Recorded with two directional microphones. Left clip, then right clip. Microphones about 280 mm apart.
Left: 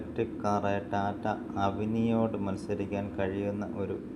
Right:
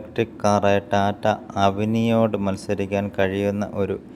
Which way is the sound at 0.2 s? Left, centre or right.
Right.